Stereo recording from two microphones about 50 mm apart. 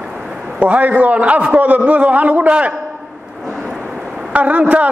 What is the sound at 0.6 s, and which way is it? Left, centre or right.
A man's voice, right.